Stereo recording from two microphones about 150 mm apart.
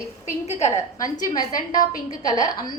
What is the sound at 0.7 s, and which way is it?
A woman's voice, 25° left (ahead or behind).